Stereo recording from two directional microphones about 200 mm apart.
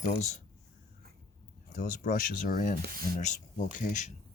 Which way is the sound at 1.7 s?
40° left (ahead or behind).